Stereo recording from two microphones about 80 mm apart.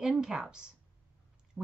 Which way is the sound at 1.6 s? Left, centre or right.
Centre.